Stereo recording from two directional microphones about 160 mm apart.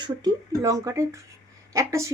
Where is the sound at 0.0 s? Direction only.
25° right (ahead or behind).